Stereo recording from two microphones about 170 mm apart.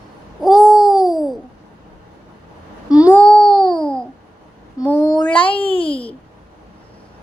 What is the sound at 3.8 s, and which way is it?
Babbling, 5° left (ahead or behind).